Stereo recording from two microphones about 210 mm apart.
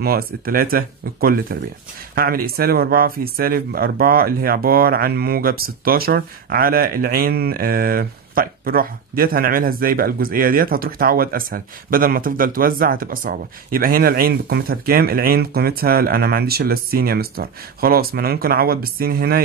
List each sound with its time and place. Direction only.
0.0 s speech: 45° right (ahead or behind)